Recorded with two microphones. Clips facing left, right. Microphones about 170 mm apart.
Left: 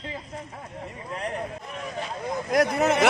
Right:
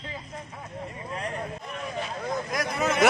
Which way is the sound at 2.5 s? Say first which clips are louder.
Left 8 dB; 65° left (ahead or behind).